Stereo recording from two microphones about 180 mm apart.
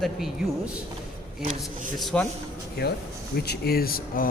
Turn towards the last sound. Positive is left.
turn(degrees=50)  # may be behind; listen again after turning